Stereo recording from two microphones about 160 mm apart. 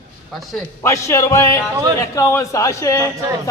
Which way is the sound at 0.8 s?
20° left (ahead or behind).